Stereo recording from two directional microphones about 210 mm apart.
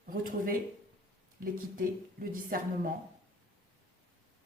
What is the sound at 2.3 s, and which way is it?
Speech, 40° right (ahead or behind).